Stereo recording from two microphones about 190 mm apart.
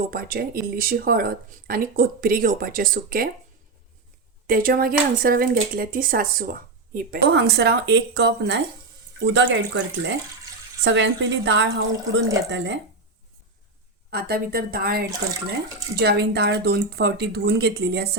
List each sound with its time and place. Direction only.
0.1 s speech: 50° right (ahead or behind)
4.4 s speech: 50° right (ahead or behind)
7.3 s speech: 60° right (ahead or behind)
14.1 s speech: 55° right (ahead or behind)